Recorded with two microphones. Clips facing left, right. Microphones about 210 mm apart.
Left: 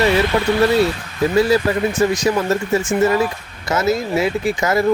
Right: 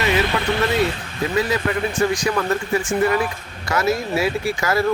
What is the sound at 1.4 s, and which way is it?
Speech, 30° left (ahead or behind).